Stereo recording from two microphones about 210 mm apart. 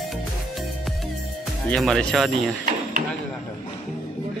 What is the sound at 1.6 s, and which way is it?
Speech, 5° left (ahead or behind).